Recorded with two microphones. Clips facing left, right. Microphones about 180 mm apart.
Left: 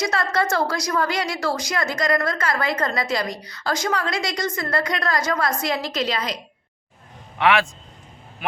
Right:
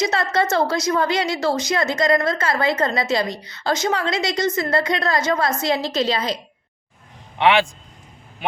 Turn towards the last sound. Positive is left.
turn(degrees=-30)  # may be behind; listen again after turning